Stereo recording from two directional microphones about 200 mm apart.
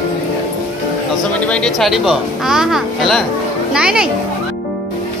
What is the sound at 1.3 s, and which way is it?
A child's voice, 5° left (ahead or behind).